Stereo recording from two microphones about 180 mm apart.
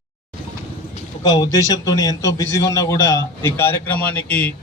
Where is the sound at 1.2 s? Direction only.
20° left (ahead or behind).